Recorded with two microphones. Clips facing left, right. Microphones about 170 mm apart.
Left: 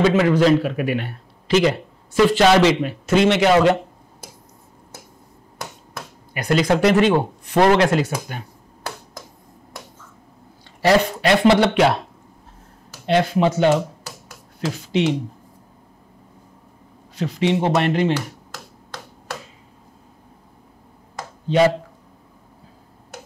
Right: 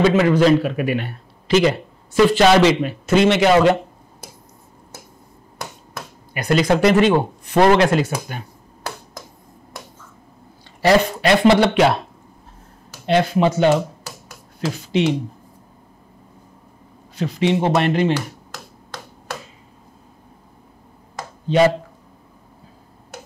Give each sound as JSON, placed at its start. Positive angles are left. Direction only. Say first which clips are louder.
{"t": 0.0, "sound": "speech", "louder": "right 1 dB", "side_deg": -15}
{"t": 5.6, "sound": "a sound", "louder": "right 1 dB", "side_deg": -20}
{"t": 7.5, "sound": "speech", "louder": "right 1 dB", "side_deg": -20}
{"t": 8.3, "sound": "finger snapping", "louder": "right 1 dB", "side_deg": -20}
{"t": 10.8, "sound": "speech", "louder": "right 1 dB", "side_deg": -15}
{"t": 13.0, "sound": "speech", "louder": "right 1 dB", "side_deg": -15}
{"t": 17.7, "sound": "speech", "louder": "right 1 dB", "side_deg": -15}
{"t": 21.5, "sound": "speech", "louder": "right 1 dB", "side_deg": -15}